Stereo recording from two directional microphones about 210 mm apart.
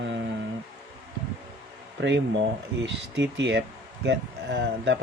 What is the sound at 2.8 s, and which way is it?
Speech, 55° right (ahead or behind).